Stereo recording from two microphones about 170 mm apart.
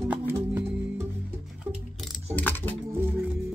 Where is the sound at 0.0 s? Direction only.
10° right (ahead or behind).